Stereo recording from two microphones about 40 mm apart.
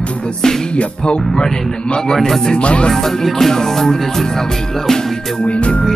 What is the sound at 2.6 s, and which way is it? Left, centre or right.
Music, left.